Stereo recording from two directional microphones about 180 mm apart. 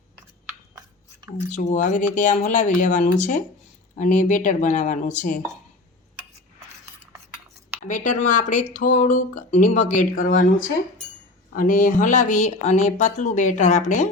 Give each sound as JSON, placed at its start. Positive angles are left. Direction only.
{"t": 0.4, "sound": "a sound", "side_deg": -20}
{"t": 1.5, "sound": "speech", "side_deg": 45}
{"t": 7.9, "sound": "speech", "side_deg": 45}
{"t": 11.5, "sound": "speech", "side_deg": 45}